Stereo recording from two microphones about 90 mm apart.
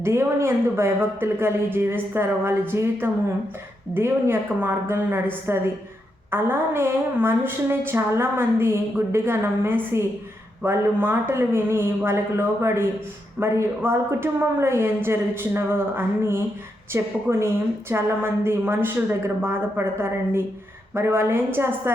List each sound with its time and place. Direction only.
0.0 s a woman's voice: 30° right (ahead or behind)